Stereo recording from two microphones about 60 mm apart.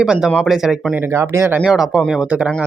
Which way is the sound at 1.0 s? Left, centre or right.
Right.